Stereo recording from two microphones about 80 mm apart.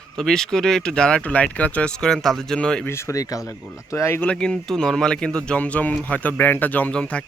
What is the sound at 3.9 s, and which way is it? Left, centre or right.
Speech, left.